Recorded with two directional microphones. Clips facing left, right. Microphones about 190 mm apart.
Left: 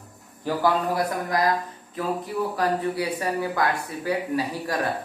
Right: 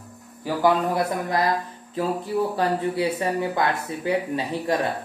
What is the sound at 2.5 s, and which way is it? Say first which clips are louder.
Speech: right 1 dB; 25° right (ahead or behind).